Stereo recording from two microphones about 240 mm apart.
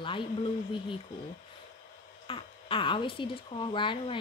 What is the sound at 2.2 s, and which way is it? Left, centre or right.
Speech, left.